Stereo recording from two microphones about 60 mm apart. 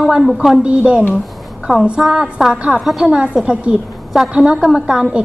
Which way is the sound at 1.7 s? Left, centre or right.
Centre.